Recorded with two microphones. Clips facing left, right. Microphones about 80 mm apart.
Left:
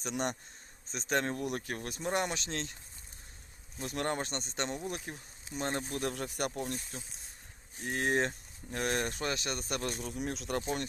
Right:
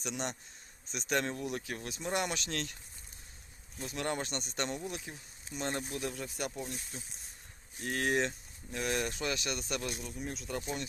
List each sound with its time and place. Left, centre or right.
0.0 s speech: left
3.8 s speech: left
4.9 s speech: left
5.5 s speech: left
7.8 s speech: left
8.2 s speech: left
10.1 s speech: left